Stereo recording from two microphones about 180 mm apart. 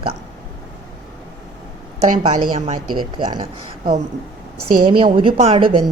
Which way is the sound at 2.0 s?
40° right (ahead or behind).